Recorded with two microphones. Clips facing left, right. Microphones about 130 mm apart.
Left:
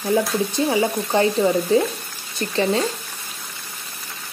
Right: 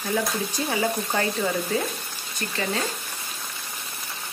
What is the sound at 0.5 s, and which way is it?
Speech, 25° left (ahead or behind).